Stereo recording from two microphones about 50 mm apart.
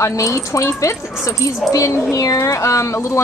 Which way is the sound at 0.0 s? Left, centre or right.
Left.